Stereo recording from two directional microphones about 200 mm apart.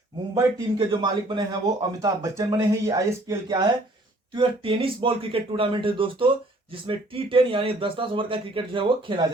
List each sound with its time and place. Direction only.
0.3 s speech: 20° right (ahead or behind)